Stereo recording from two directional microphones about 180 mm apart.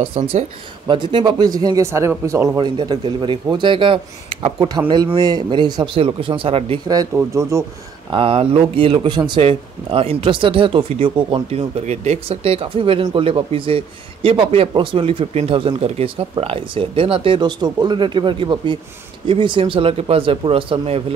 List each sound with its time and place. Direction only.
0.0 s speech: 30° right (ahead or behind); by 7.6 s 15° right (ahead or behind)
8.1 s speech: 30° right (ahead or behind)